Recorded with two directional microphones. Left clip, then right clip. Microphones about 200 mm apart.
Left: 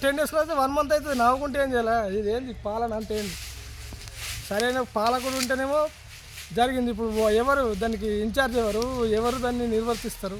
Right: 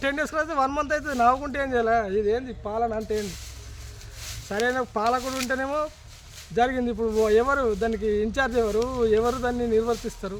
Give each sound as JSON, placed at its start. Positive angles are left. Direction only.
{"t": 0.0, "sound": "speech", "side_deg": 0}
{"t": 4.4, "sound": "speech", "side_deg": 0}